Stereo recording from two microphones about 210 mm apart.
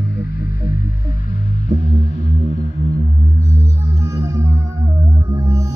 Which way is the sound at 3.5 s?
15° right (ahead or behind).